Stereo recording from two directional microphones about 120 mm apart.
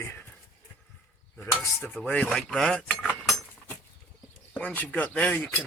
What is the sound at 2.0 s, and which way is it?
Cutlery, 10° left (ahead or behind).